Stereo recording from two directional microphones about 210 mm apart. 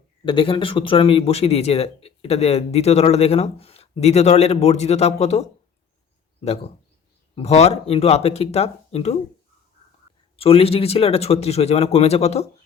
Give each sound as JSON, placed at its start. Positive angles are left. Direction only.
{"t": 0.3, "sound": "speech", "side_deg": 25}
{"t": 7.3, "sound": "speech", "side_deg": 30}
{"t": 10.3, "sound": "speech", "side_deg": 25}